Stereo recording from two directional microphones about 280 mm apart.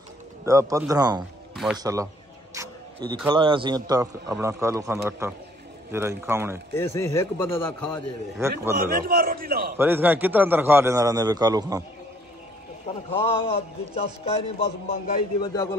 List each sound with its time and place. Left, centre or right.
0.5 s a man's voice: centre
1.5 s music: centre
1.8 s a man's voice: centre
2.5 s a sound: centre
3.3 s a man's voice: centre
6.7 s a man's voice: centre
8.4 s a man's voice: centre
8.8 s a man's voice: right
9.8 s a man's voice: centre
12.8 s a man's voice: left
15.4 s a man's voice: centre